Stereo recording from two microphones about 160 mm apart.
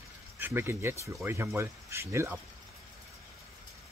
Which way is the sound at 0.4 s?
15° right (ahead or behind).